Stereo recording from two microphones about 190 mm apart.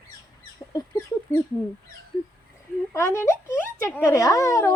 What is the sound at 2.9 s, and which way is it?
Speech, 15° left (ahead or behind).